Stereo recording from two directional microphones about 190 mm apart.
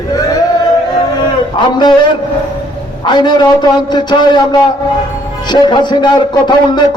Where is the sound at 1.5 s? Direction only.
25° left (ahead or behind).